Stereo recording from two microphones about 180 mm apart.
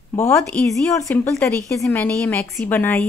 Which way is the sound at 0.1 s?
15° left (ahead or behind).